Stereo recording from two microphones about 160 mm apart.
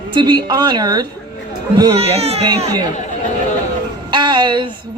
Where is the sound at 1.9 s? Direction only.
40° right (ahead or behind).